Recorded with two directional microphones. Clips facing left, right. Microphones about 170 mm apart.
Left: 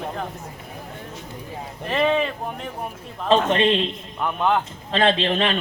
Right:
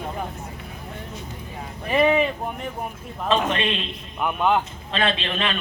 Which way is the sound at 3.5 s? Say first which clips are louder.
Left 6 dB; 30° left (ahead or behind).